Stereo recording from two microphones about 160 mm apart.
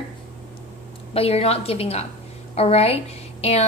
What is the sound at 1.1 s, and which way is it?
A woman's voice, 40° left (ahead or behind).